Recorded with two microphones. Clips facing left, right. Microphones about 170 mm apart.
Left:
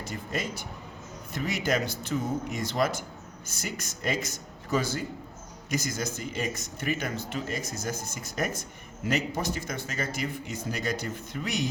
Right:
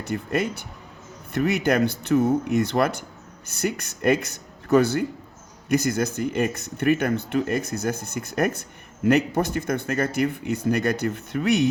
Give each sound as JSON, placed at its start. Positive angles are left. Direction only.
{"t": 0.1, "sound": "speech", "side_deg": -60}